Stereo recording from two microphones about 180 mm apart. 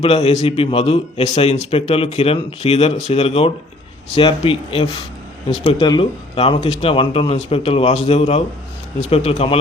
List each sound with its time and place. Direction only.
0.0 s a man's voice: 35° left (ahead or behind)
5.8 s a man's voice: 25° left (ahead or behind)